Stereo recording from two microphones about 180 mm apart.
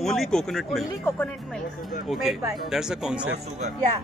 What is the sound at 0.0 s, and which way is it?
Speech, centre (ahead or behind).